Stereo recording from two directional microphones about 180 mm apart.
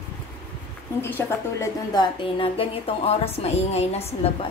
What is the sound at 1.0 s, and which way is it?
A woman's voice, 10° left (ahead or behind).